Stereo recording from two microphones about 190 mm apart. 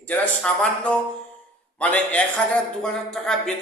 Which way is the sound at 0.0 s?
5° left (ahead or behind).